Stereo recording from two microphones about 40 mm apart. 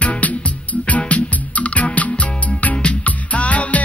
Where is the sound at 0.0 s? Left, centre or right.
Left.